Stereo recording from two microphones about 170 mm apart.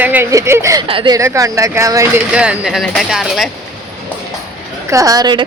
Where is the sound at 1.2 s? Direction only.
20° right (ahead or behind); by 3.5 s centre (ahead or behind).